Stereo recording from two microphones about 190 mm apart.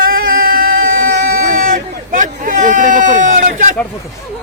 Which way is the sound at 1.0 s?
45° right (ahead or behind).